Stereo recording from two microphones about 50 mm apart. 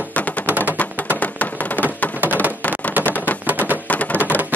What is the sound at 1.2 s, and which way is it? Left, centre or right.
Tap, left.